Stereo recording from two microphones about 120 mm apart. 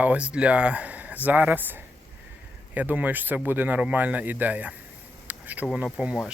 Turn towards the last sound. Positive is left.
turn(degrees=-5)  # may be behind; listen again after turning